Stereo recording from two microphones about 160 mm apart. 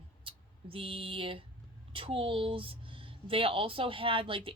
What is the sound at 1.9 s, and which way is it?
Speech, 35° right (ahead or behind).